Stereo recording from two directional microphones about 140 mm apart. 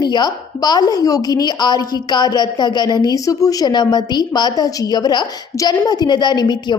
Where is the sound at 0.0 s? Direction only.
30° left (ahead or behind).